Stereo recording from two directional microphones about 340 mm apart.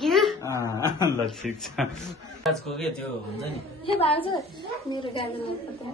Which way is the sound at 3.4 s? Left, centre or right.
Centre.